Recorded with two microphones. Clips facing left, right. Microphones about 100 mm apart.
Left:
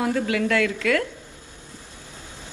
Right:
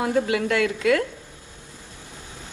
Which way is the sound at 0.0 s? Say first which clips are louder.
Right 1 dB; 25° right (ahead or behind).